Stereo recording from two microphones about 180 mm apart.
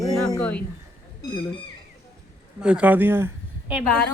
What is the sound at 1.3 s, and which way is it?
Speech, 25° left (ahead or behind).